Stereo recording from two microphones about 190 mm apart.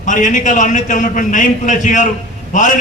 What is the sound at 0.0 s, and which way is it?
A man's voice, 40° left (ahead or behind).